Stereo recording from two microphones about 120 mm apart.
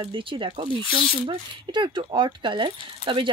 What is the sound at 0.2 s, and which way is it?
Speech, 45° right (ahead or behind).